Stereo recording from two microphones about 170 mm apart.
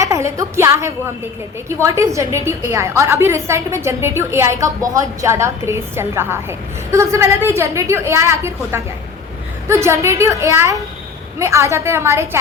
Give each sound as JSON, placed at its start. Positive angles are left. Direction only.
{"t": 0.0, "sound": "a woman's voice", "side_deg": -15}